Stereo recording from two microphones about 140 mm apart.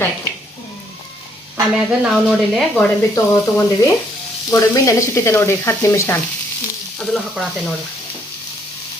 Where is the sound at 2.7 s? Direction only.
20° left (ahead or behind).